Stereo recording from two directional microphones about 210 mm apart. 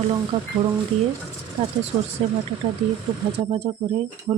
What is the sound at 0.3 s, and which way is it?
Speech, 20° right (ahead or behind).